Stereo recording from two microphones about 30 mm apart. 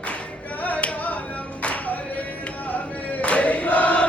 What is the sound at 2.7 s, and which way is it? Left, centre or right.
Chant, left.